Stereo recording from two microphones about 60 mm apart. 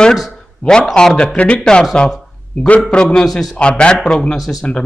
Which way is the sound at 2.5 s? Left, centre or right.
Left.